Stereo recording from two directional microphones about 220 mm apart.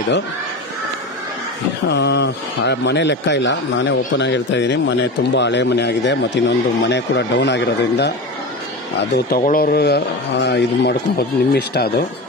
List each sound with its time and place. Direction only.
1.9 s speech: 50° left (ahead or behind)